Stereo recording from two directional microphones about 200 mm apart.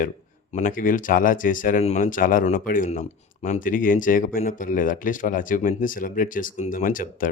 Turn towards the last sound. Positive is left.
turn(degrees=45)  # may be behind; listen again after turning